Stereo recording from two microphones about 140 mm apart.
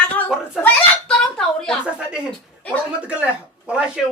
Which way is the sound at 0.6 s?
5° left (ahead or behind).